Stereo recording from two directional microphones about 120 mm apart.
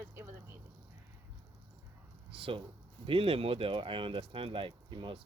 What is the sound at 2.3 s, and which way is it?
Speech, 50° right (ahead or behind).